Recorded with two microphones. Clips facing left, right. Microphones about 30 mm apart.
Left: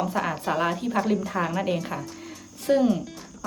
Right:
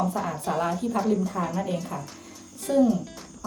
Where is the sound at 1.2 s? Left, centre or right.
Left.